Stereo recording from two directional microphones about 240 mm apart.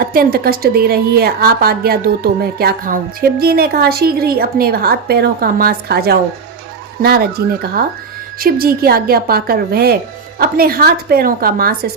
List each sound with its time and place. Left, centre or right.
0.0 s a woman's voice: right